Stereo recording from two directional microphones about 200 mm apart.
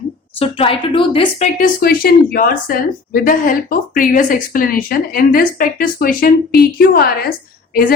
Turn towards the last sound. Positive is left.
turn(degrees=45)  # may be behind; listen again after turning